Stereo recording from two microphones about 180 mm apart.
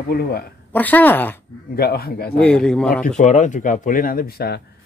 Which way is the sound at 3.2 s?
40° left (ahead or behind).